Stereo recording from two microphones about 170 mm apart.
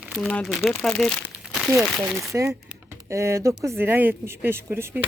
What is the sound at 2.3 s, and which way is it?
Speech, 15° right (ahead or behind).